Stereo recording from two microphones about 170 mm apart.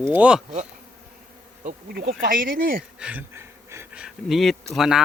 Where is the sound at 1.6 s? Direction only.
65° right (ahead or behind).